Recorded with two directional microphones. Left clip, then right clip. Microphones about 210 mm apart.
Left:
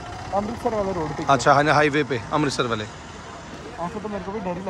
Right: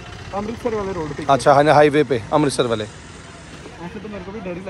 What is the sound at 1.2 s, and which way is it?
Speech, 15° left (ahead or behind).